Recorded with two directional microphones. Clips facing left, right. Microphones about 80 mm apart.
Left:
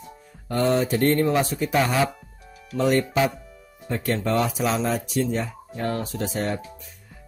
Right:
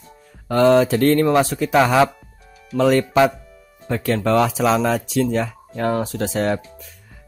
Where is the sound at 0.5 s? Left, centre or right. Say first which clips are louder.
Right 7 dB; right.